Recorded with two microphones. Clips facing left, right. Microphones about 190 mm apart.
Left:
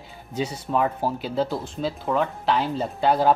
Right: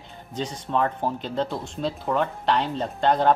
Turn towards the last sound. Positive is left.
turn(degrees=5)  # may be behind; listen again after turning